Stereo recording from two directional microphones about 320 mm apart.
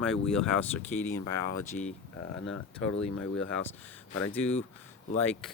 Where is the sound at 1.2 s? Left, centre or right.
Left.